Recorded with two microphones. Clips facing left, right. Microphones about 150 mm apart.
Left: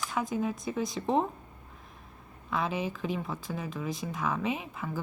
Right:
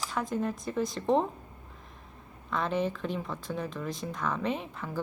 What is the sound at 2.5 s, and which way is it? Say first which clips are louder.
A woman's voice: right 2 dB; 5° left (ahead or behind).